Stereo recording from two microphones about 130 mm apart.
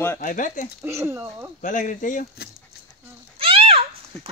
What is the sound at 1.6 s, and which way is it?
Speech, 80° left.